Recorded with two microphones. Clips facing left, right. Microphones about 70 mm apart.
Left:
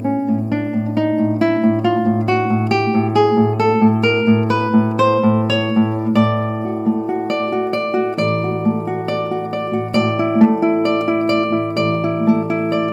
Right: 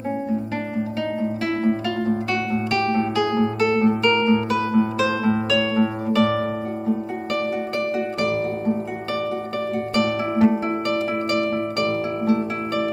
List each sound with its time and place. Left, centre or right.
1.4 s guitar: left
2.7 s music: left
4.9 s music: left
9.9 s music: left